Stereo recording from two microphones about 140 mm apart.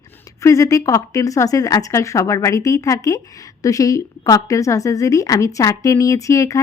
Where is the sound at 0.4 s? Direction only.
25° left (ahead or behind).